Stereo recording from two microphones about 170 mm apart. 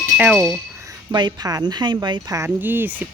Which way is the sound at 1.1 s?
25° right (ahead or behind).